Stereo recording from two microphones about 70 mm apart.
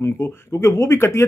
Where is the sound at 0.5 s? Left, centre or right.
Left.